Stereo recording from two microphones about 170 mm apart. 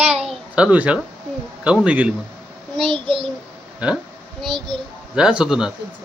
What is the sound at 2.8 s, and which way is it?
Speech, 30° right (ahead or behind).